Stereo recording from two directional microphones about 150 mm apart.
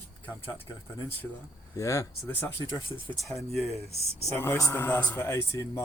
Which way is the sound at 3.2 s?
Centre (ahead or behind).